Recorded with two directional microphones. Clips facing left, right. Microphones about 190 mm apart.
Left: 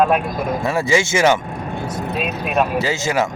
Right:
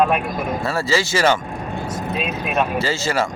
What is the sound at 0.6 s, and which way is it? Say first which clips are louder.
Speech: left 4 dB; 15° left (ahead or behind).